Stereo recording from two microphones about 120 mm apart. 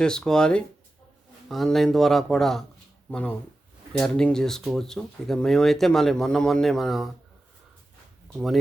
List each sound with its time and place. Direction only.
0.0 s speech: 5° left (ahead or behind)
8.3 s speech: centre (ahead or behind)